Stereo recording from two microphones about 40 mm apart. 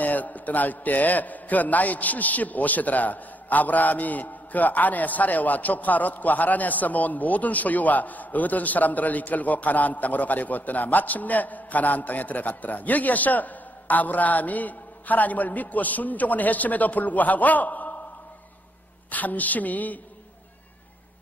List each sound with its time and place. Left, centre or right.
0.0 s a man's voice: left
19.0 s a man's voice: left